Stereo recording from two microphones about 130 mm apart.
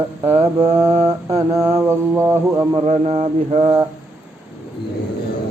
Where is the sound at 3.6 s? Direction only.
25° right (ahead or behind).